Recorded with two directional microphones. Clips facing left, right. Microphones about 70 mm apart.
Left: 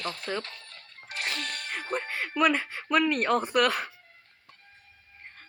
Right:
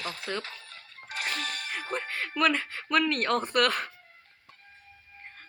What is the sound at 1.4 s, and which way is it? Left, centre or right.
Music, left.